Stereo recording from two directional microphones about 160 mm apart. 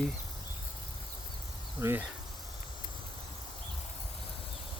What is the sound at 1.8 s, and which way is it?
Speech, 15° right (ahead or behind).